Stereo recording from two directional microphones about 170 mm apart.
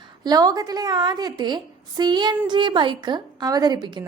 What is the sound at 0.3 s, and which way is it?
A woman's voice, 20° right (ahead or behind).